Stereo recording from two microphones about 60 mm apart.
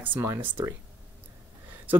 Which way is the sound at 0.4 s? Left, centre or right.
Right.